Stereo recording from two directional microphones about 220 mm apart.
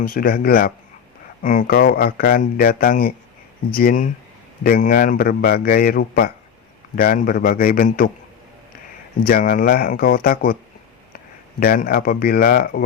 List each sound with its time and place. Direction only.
0.0 s a man's voice: 40° left (ahead or behind)
9.2 s a man's voice: 40° left (ahead or behind)
11.6 s a man's voice: 40° left (ahead or behind)